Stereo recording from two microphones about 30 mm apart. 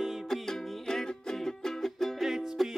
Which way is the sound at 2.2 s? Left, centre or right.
Centre.